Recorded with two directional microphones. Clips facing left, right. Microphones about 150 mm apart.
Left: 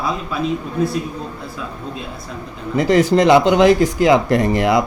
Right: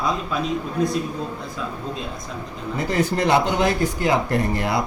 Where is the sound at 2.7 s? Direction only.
90° left.